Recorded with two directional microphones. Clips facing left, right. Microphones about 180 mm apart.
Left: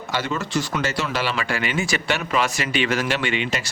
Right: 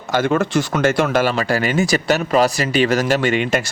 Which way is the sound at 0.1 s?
50° right (ahead or behind).